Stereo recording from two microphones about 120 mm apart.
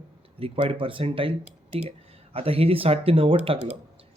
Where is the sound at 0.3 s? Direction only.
50° right (ahead or behind).